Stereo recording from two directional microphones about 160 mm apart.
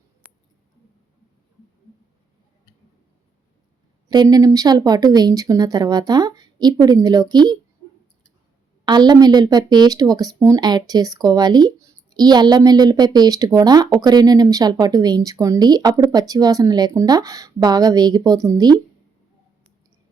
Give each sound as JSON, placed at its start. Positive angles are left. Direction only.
{"t": 4.1, "sound": "speech", "side_deg": -25}
{"t": 8.8, "sound": "speech", "side_deg": -25}